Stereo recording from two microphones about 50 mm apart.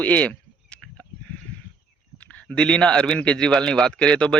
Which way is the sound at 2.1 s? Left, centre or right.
Left.